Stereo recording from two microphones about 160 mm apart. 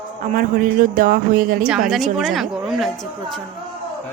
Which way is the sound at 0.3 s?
60° right (ahead or behind).